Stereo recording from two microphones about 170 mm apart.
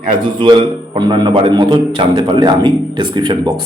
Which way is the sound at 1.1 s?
30° right (ahead or behind).